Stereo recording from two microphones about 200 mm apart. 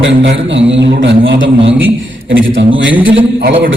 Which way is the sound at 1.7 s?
10° right (ahead or behind).